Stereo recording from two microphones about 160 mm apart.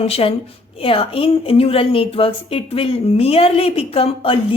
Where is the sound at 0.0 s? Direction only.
35° left (ahead or behind).